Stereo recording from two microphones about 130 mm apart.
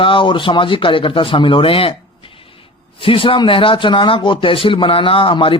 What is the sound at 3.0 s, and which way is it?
Speech, 45° left (ahead or behind).